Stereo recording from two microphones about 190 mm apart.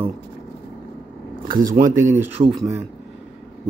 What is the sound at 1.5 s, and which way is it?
Speech, 45° right (ahead or behind).